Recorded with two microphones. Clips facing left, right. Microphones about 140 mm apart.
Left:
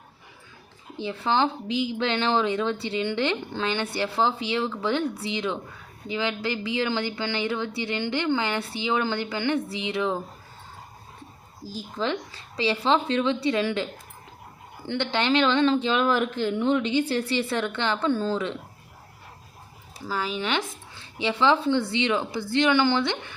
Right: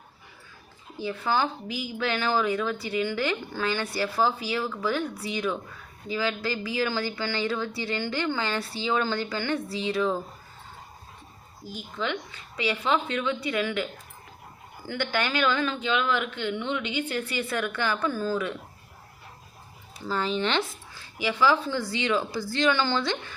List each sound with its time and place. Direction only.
0.9 s speech: 25° left (ahead or behind)
11.6 s speech: 35° left (ahead or behind)
14.8 s speech: 25° left (ahead or behind)
20.1 s speech: 5° left (ahead or behind)
20.9 s speech: 25° left (ahead or behind)